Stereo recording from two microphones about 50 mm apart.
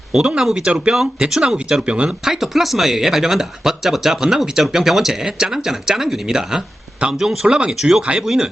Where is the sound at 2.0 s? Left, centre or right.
Centre.